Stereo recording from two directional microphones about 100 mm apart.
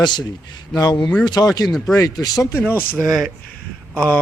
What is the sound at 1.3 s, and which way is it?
A man's voice, 40° left (ahead or behind).